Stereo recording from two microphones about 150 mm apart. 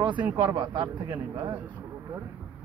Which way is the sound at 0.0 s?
30° right (ahead or behind).